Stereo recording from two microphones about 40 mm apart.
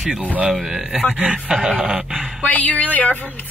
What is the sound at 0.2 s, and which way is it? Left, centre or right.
Speech, right.